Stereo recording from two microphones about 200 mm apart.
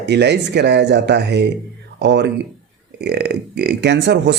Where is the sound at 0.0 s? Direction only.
55° right (ahead or behind).